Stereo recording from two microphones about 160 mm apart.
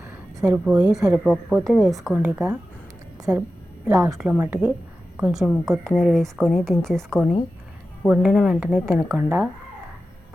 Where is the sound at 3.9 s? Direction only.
20° right (ahead or behind).